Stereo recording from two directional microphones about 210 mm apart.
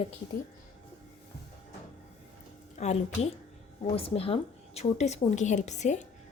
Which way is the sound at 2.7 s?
30° left (ahead or behind).